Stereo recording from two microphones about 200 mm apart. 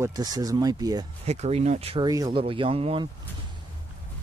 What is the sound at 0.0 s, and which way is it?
Speech, 20° right (ahead or behind).